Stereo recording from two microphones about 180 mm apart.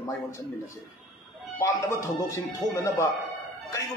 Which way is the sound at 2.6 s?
20° left (ahead or behind).